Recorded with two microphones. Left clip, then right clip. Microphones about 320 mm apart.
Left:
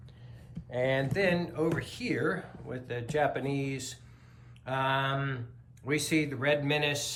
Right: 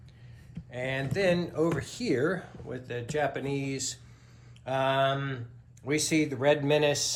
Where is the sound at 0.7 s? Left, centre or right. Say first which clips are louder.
Left 3 dB; centre.